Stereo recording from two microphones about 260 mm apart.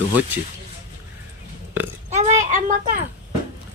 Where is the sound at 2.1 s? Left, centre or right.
Right.